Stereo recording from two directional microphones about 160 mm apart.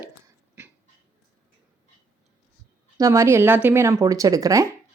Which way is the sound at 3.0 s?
20° right (ahead or behind).